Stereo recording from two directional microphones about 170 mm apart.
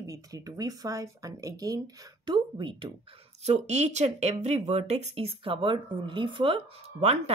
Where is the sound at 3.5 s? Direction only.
40° right (ahead or behind).